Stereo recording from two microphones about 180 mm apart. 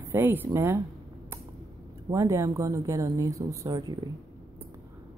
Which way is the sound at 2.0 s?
20° right (ahead or behind).